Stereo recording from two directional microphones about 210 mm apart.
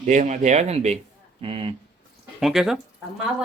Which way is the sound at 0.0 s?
35° right (ahead or behind).